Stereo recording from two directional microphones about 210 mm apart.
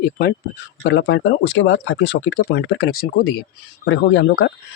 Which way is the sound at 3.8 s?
60° left (ahead or behind).